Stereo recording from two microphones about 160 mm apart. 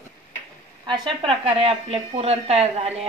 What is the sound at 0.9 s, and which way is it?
A woman's voice, 30° right (ahead or behind).